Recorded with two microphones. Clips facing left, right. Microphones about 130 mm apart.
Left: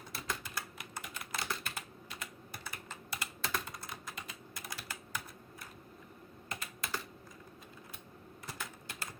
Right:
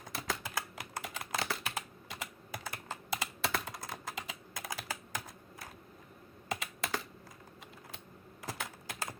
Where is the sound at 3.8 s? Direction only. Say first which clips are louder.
Right 4 dB; 90° right.